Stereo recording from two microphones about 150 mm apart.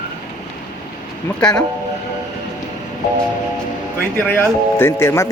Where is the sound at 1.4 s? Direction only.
5° left (ahead or behind).